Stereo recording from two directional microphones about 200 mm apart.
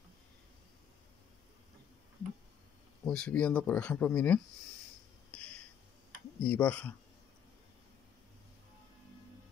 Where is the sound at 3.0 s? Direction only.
5° left (ahead or behind).